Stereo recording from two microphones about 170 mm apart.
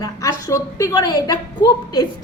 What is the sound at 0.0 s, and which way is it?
A woman's voice, 20° left (ahead or behind).